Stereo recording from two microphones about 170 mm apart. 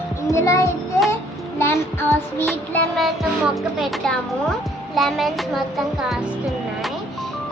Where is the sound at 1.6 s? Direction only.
15° left (ahead or behind).